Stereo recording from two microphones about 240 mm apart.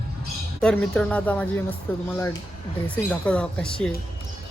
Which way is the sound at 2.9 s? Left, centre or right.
Centre.